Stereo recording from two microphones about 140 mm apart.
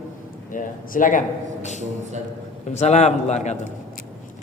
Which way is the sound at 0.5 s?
75° left (ahead or behind).